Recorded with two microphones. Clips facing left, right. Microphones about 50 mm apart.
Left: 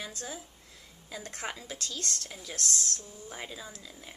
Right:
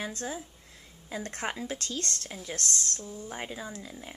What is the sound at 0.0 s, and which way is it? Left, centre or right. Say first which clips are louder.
Speech: right 5 dB; right.